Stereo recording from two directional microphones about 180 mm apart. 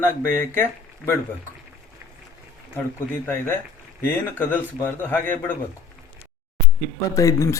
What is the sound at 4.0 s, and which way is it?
Speech, 10° left (ahead or behind).